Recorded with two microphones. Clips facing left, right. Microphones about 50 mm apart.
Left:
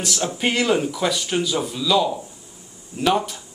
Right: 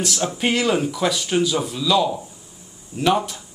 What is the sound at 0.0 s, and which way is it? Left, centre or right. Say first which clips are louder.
Speech: right 1 dB; centre.